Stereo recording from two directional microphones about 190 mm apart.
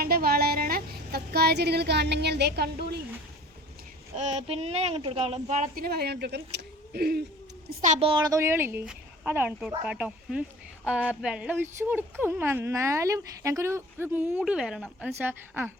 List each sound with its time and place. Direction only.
0.0 s a sound: 50° right (ahead or behind)
4.1 s speech: 35° right (ahead or behind); by 7.2 s 55° right (ahead or behind)
7.7 s a woman's voice: 40° right (ahead or behind); by 15.7 s 10° right (ahead or behind)